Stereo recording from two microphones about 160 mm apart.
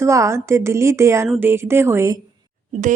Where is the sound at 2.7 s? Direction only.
50° right (ahead or behind).